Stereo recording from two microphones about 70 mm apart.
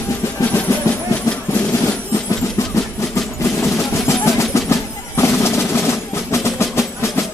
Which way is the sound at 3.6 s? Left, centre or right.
Left.